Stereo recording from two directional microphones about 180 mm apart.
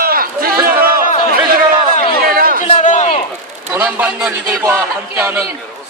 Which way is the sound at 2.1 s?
55° right (ahead or behind).